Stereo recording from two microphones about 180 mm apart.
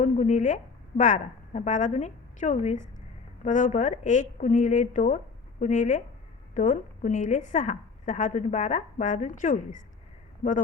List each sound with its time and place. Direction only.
0.0 s a woman's voice: 40° left (ahead or behind)